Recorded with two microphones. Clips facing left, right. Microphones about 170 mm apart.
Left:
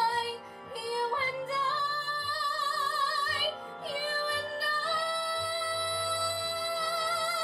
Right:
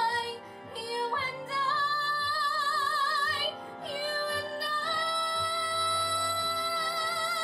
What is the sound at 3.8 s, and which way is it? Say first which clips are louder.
Music: right 1 dB; centre (ahead or behind).